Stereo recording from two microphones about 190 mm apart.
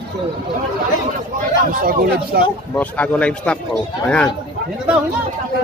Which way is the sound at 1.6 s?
50° right (ahead or behind).